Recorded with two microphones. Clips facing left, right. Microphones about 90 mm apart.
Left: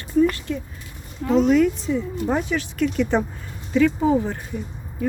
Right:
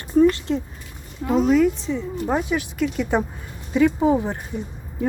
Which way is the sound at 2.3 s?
10° right (ahead or behind).